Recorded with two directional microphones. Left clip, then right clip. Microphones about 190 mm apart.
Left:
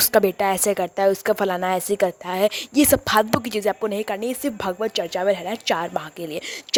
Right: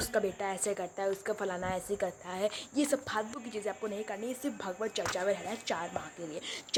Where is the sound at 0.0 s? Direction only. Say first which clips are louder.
Left 14 dB; 60° left (ahead or behind).